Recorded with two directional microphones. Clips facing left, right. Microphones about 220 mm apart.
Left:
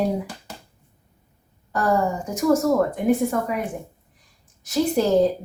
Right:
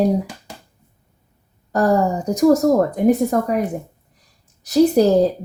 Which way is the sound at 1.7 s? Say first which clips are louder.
Right 5 dB; 40° right (ahead or behind).